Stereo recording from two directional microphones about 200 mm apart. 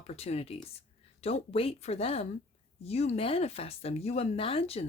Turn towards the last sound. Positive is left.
turn(degrees=30)  # may be behind; listen again after turning